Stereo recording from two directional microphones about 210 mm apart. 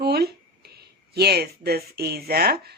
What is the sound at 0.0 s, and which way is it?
A woman's voice, 50° right (ahead or behind).